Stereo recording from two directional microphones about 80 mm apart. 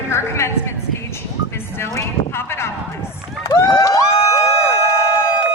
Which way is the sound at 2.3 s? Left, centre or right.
Left.